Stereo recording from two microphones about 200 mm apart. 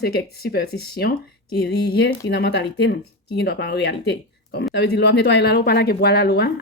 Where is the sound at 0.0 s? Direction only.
55° left (ahead or behind).